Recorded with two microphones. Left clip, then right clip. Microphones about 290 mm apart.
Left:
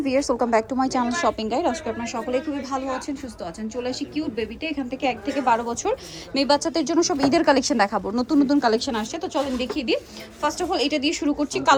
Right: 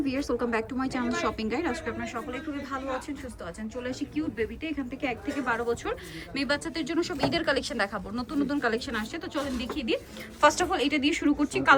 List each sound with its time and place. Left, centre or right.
0.0 s a woman's voice: centre